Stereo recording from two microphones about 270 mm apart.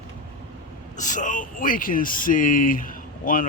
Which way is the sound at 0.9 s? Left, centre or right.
Left.